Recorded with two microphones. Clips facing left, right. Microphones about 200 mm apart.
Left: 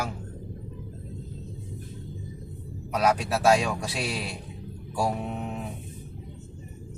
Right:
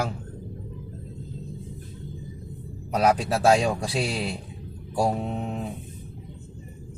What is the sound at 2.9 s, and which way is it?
A man's voice, 30° right (ahead or behind).